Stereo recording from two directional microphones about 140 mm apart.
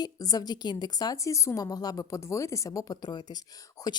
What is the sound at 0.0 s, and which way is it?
A woman's voice, 25° left (ahead or behind).